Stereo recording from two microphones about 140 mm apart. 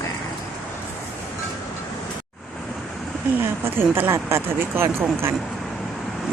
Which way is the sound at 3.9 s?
20° right (ahead or behind).